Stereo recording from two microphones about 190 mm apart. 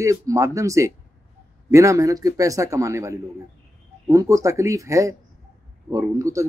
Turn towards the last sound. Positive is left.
turn(degrees=-15)  # may be behind; listen again after turning